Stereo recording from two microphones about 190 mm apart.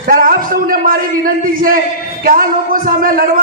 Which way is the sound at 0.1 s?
50° right (ahead or behind).